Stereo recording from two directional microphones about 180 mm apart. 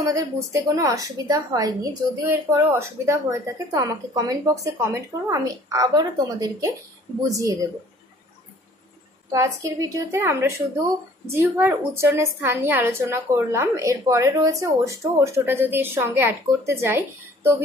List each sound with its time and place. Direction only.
0.0 s a woman's voice: 15° right (ahead or behind)
9.3 s a woman's voice: 15° right (ahead or behind)